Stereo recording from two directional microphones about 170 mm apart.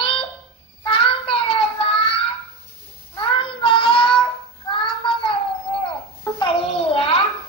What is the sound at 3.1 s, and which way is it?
Child singing, 30° left (ahead or behind).